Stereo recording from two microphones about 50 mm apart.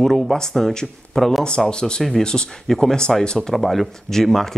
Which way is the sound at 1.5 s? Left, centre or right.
Centre.